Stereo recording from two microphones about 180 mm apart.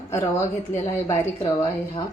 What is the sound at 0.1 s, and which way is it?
Speech, 15° left (ahead or behind).